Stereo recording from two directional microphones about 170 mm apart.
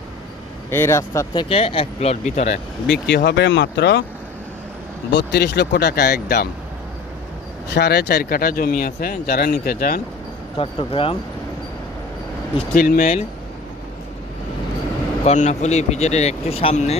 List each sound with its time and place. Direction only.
0.7 s speech: 15° left (ahead or behind); by 2.6 s 40° left (ahead or behind)
2.8 s speech: 90° left
5.1 s speech: 80° left
7.7 s speech: 70° left (ahead or behind)
10.6 s speech: 30° left (ahead or behind)
12.7 s speech: 60° left (ahead or behind)
15.2 s speech: 40° left (ahead or behind)